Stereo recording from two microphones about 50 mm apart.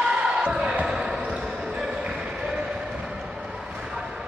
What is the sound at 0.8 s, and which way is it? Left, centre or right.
Basketball bounce, centre.